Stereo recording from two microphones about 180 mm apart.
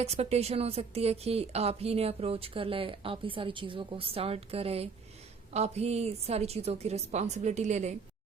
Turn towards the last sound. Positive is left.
turn(degrees=-40)  # may be behind; listen again after turning